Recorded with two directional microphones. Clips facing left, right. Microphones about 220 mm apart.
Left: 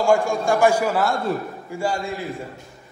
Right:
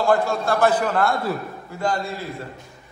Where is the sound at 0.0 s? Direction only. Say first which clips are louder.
Left 1 dB; 15° left (ahead or behind).